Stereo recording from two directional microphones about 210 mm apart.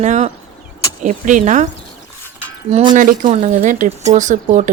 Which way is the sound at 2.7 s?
35° right (ahead or behind).